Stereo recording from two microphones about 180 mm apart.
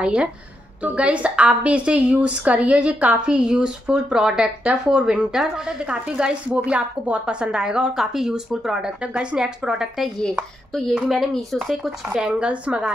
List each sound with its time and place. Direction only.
0.0 s a woman's voice: 5° right (ahead or behind)